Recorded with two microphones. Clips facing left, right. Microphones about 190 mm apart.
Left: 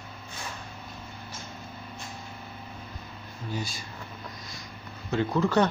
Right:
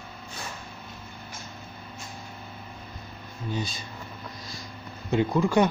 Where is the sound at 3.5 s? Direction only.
20° right (ahead or behind).